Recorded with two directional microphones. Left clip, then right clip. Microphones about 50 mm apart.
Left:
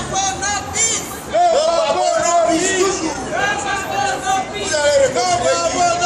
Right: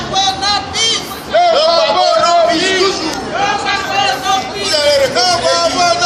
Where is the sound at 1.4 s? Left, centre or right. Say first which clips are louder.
Right 4 dB; left.